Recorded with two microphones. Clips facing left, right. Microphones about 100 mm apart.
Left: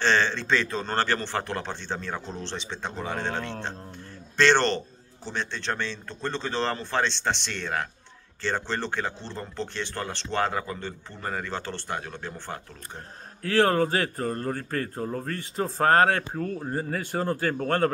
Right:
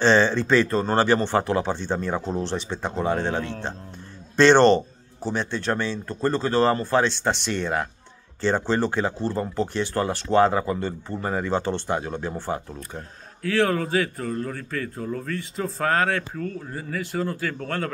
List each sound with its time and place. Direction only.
0.0 s speech: 15° right (ahead or behind)
13.4 s a man's voice: 50° left (ahead or behind)